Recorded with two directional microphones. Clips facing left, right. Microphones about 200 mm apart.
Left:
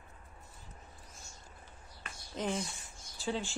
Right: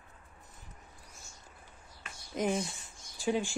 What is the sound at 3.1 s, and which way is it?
Speech, 15° right (ahead or behind).